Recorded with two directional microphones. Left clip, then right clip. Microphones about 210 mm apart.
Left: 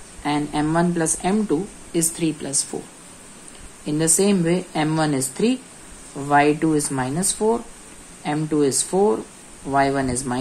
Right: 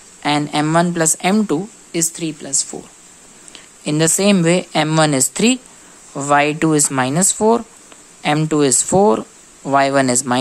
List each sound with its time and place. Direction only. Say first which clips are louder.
0.2 s a woman's voice: right 5 dB; 30° right (ahead or behind)
3.8 s a woman's voice: right 5 dB; 35° right (ahead or behind)